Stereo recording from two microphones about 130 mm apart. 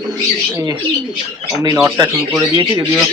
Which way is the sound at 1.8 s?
25° right (ahead or behind).